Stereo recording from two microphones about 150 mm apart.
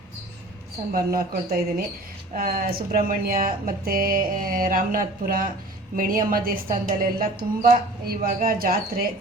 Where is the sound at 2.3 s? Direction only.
75° right (ahead or behind).